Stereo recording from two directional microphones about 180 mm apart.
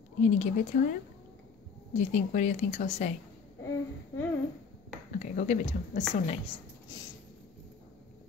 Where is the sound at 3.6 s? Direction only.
20° left (ahead or behind).